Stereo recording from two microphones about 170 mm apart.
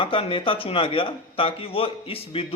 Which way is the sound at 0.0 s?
30° left (ahead or behind).